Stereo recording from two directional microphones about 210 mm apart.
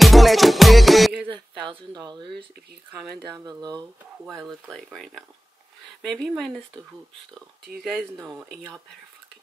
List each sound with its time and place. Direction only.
0.0 s music: centre (ahead or behind)
2.0 s speech: 20° right (ahead or behind)
3.3 s speech: 20° right (ahead or behind)
4.3 s speech: centre (ahead or behind)
7.8 s speech: centre (ahead or behind)
8.2 s speech: 15° right (ahead or behind)